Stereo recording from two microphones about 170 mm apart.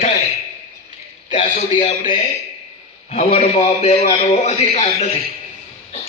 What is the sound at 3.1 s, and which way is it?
A man's voice, 40° left (ahead or behind).